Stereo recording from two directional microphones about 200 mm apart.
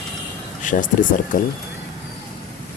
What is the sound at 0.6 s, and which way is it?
Speech, 40° left (ahead or behind).